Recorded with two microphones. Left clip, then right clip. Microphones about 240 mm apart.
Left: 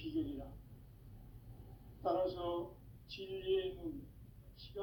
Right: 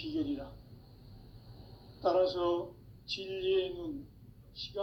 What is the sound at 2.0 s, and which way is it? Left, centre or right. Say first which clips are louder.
A man's voice: right 8 dB; right.